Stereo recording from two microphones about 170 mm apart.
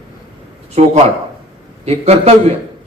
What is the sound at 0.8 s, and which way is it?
Speech, 45° right (ahead or behind).